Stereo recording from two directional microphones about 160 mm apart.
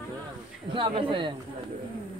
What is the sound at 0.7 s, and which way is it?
Speech, 30° right (ahead or behind).